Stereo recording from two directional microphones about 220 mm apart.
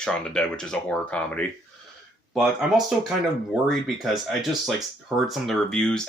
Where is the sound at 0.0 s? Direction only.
5° left (ahead or behind).